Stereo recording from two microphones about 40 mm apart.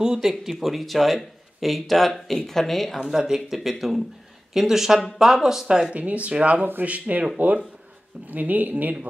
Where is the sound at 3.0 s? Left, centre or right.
Centre.